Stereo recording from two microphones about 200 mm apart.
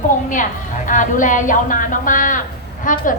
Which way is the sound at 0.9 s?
40° left (ahead or behind).